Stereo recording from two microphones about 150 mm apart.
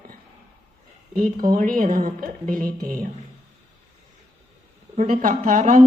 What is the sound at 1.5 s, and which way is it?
Speech, 65° right (ahead or behind).